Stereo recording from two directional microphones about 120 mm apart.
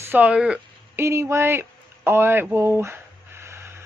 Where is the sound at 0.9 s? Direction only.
20° right (ahead or behind).